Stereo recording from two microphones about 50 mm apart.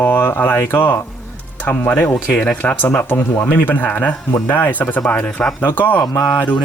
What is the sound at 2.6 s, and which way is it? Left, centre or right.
Speech, left.